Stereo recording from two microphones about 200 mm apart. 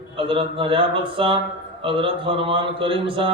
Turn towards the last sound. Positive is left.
turn(degrees=-25)  # may be behind; listen again after turning